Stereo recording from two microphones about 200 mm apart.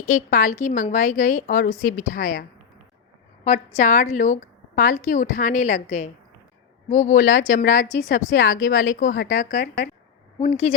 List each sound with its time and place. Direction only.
0.0 s a woman's voice: 40° left (ahead or behind)
10.4 s a woman's voice: 30° left (ahead or behind)